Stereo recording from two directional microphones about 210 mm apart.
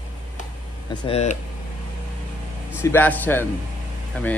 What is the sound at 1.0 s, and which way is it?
Speech, 30° left (ahead or behind).